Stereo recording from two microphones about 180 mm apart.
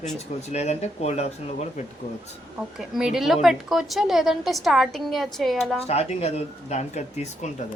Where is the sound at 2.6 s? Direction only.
5° right (ahead or behind).